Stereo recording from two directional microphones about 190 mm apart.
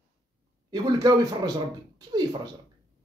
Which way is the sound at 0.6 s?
20° right (ahead or behind).